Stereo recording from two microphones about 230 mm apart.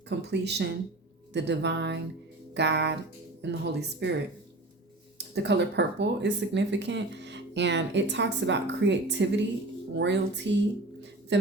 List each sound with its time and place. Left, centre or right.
0.1 s speech: right
5.1 s speech: right